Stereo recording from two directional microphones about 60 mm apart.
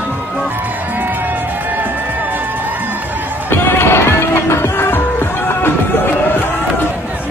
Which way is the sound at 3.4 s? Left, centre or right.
Left.